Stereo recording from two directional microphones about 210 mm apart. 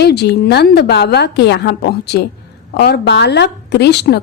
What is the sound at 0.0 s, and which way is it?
A woman's voice, 50° left (ahead or behind).